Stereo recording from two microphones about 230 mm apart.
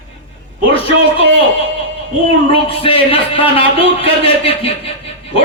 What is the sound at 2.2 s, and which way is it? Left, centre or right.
Speech, left.